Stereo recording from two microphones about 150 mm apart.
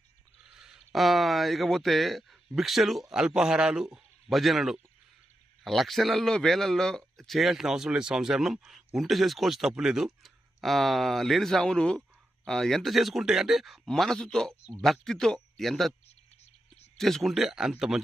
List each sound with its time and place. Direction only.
0.5 s a man's voice: 5° right (ahead or behind)
17.0 s a man's voice: centre (ahead or behind)